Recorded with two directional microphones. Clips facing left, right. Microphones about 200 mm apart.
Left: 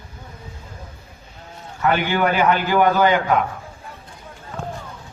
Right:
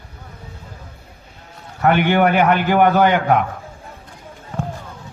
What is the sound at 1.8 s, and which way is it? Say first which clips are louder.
A man's voice: right 4 dB; 60° right (ahead or behind).